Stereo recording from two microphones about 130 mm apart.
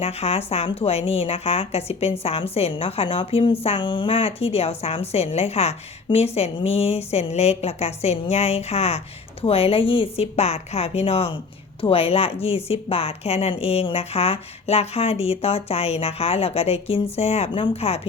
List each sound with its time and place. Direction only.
0.0 s a woman's voice: 50° left (ahead or behind)